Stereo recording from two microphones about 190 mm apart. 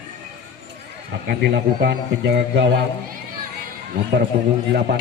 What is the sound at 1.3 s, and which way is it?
Speech, 60° right (ahead or behind).